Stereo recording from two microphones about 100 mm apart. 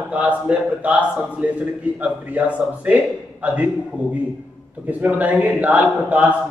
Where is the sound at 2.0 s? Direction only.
15° right (ahead or behind).